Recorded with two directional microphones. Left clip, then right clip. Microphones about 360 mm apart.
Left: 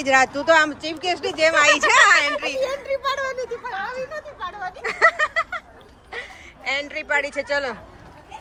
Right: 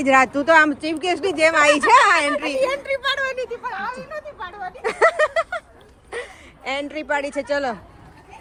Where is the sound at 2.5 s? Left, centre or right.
Right.